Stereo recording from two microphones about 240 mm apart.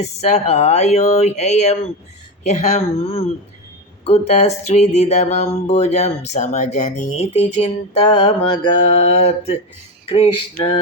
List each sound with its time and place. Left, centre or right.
0.0 s speech: left